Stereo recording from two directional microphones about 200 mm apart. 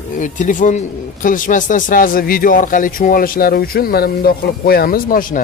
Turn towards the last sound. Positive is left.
turn(degrees=45)  # may be behind; listen again after turning